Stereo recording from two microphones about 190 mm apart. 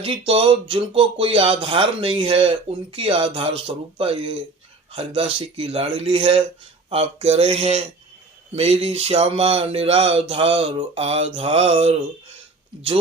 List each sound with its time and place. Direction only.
0.0 s speech: 30° right (ahead or behind)